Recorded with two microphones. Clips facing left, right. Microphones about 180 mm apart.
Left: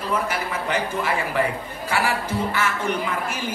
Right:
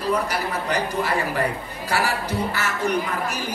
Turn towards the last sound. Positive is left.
turn(degrees=-40)  # may be behind; listen again after turning